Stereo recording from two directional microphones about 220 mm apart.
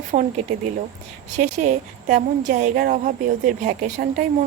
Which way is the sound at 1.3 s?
30° right (ahead or behind).